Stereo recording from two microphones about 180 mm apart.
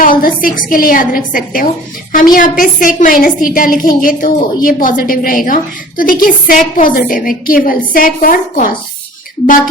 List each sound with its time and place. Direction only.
0.0 s a woman's voice: 50° left (ahead or behind)